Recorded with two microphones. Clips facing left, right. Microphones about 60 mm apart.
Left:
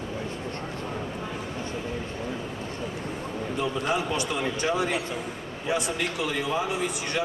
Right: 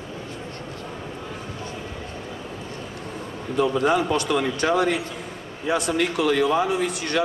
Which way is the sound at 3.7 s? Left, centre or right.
Right.